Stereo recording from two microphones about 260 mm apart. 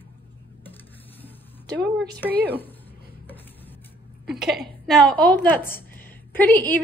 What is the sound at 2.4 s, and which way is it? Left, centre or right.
Speech, centre.